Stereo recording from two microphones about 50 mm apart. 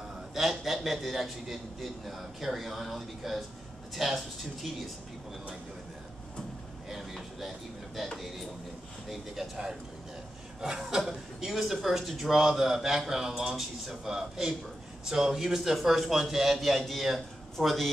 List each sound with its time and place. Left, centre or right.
0.3 s a man's voice: centre
6.9 s a man's voice: centre
9.1 s a man's voice: centre